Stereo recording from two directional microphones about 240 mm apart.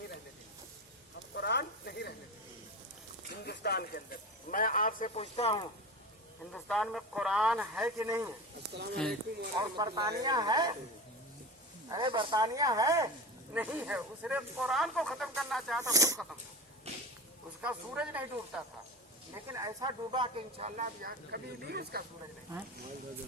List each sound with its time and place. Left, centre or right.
1.4 s a sound: left
3.4 s speech: left
6.5 s speech: centre
9.6 s speech: centre
11.9 s speech: centre
15.8 s speech: centre
16.9 s whip: right
17.6 s speech: centre; by 22.0 s right